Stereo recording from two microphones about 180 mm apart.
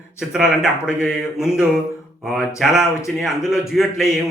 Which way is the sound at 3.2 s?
Centre (ahead or behind).